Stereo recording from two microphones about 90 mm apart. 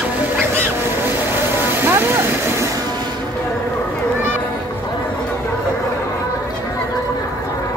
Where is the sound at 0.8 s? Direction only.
25° right (ahead or behind).